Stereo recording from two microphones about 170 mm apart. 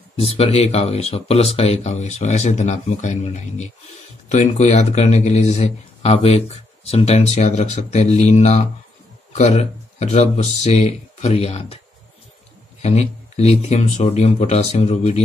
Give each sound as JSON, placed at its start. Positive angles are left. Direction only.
{"t": 0.4, "sound": "a man's voice", "side_deg": 35}
{"t": 12.8, "sound": "a man's voice", "side_deg": 40}